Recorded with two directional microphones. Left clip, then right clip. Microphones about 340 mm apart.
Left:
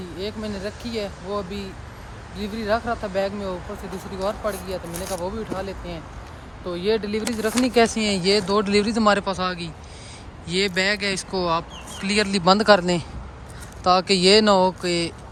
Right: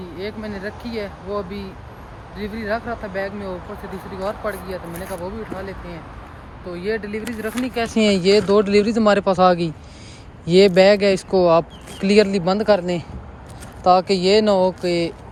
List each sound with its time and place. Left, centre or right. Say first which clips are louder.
0.2 s speech: right 1 dB; centre
7.9 s speech: right 5 dB; centre